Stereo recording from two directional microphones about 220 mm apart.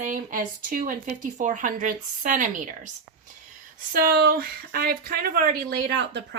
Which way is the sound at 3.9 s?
45° right (ahead or behind).